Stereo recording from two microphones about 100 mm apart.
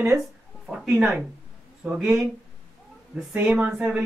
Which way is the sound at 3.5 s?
15° right (ahead or behind).